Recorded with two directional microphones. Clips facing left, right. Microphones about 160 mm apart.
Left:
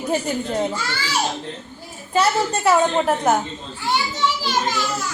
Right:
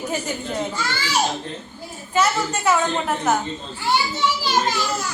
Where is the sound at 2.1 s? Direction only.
30° left (ahead or behind).